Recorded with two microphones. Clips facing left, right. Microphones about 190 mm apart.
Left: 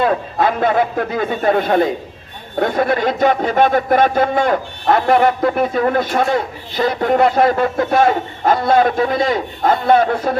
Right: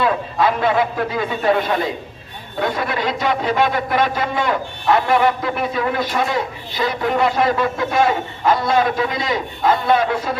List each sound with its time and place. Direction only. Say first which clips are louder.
0.0 s speech: left 2 dB; 45° left (ahead or behind)